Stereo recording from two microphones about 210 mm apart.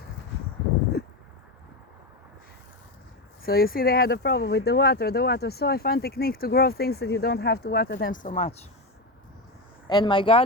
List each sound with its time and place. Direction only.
3.4 s speech: 45° left (ahead or behind)
8.1 s speech: 40° left (ahead or behind)
9.8 s speech: 20° left (ahead or behind)